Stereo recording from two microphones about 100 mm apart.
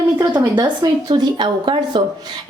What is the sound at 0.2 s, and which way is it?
A woman's voice, 40° right (ahead or behind).